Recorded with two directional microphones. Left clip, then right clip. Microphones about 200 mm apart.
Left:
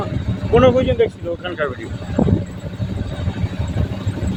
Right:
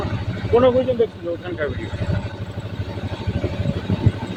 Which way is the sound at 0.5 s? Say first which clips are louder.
Left 2 dB; 25° left (ahead or behind).